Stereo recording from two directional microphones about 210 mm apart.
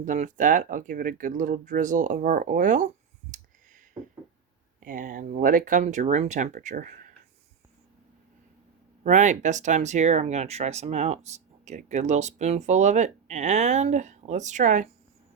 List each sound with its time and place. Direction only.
0.0 s speech: 35° right (ahead or behind)
4.8 s speech: 40° right (ahead or behind)
9.0 s speech: 35° right (ahead or behind)